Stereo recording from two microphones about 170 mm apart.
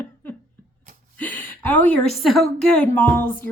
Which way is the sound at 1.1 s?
10° left (ahead or behind).